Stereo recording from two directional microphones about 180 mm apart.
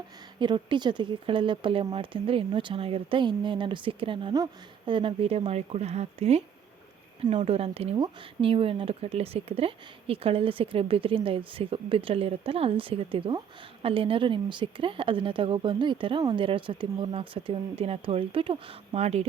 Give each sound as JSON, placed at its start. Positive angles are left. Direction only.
{"t": 0.3, "sound": "speech", "side_deg": -25}